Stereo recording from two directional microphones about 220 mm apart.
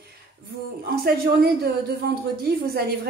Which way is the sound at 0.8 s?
45° right (ahead or behind).